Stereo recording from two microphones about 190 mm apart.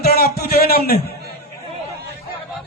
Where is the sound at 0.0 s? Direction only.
55° left (ahead or behind).